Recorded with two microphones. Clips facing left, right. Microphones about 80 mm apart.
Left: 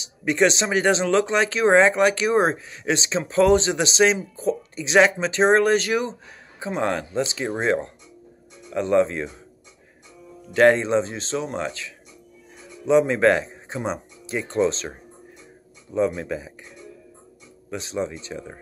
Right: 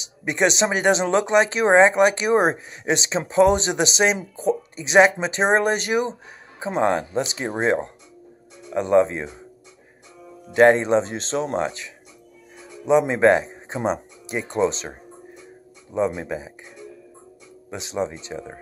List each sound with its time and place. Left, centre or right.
0.2 s speech: centre
10.5 s speech: right
17.6 s speech: right